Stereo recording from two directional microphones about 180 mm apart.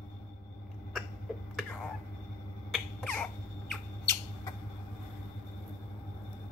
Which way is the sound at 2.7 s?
5° left (ahead or behind).